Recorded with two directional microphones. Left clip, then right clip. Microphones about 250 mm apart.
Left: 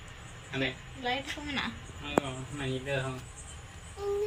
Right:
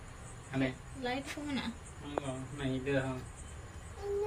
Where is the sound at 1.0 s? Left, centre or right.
Centre.